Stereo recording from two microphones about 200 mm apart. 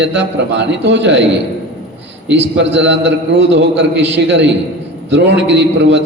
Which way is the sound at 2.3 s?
60° right (ahead or behind).